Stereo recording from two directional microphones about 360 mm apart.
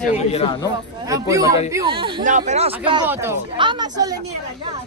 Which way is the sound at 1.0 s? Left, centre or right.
Centre.